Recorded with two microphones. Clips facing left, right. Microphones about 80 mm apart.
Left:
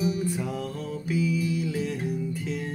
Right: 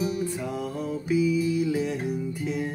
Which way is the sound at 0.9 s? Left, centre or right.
Right.